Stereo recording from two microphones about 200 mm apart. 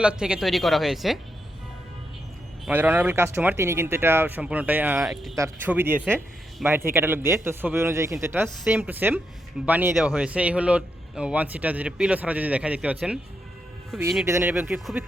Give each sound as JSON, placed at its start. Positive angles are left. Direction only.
{"t": 0.0, "sound": "speech", "side_deg": -5}
{"t": 2.6, "sound": "a man's voice", "side_deg": -10}
{"t": 14.3, "sound": "a man's voice", "side_deg": -15}